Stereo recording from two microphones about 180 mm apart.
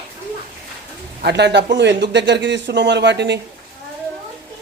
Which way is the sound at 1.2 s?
70° right (ahead or behind).